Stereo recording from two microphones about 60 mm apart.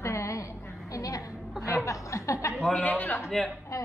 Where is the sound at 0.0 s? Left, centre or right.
Left.